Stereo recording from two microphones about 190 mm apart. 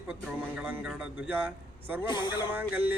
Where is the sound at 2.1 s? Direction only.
20° left (ahead or behind).